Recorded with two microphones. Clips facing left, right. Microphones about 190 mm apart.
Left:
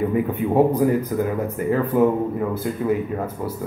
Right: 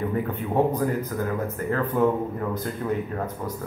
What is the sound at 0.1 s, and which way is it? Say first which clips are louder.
Speech: left 6 dB; 10° left (ahead or behind).